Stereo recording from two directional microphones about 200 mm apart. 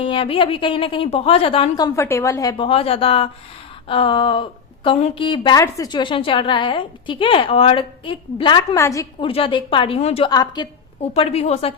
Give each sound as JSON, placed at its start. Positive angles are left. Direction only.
{"t": 0.0, "sound": "a woman's voice", "side_deg": 25}
{"t": 9.2, "sound": "a woman's voice", "side_deg": 25}
{"t": 11.1, "sound": "a woman's voice", "side_deg": 30}